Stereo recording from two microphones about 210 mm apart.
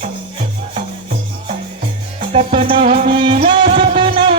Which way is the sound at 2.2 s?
25° right (ahead or behind).